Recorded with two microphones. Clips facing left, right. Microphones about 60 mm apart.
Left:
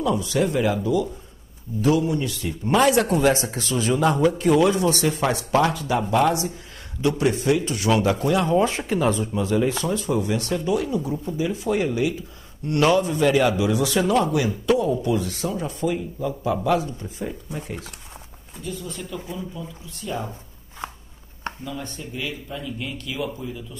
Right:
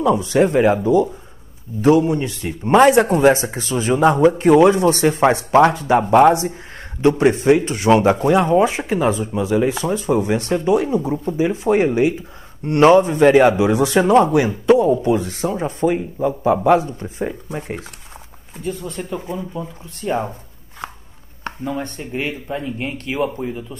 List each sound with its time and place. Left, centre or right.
0.0 s speech: right
21.5 s speech: right